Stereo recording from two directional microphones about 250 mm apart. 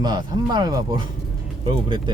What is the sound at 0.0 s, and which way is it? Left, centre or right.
Speech, centre.